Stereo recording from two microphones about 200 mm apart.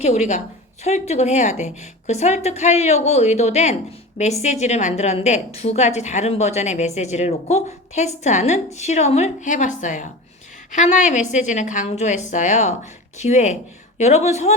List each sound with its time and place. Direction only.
0.0 s a woman's voice: 35° left (ahead or behind)